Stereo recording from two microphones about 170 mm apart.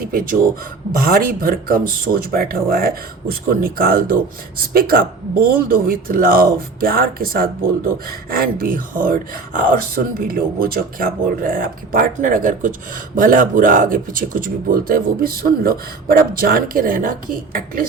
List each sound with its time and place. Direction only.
0.0 s speech: 55° right (ahead or behind)